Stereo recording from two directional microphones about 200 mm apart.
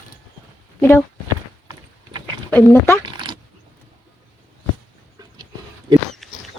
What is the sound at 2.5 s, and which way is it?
Speech, 15° left (ahead or behind).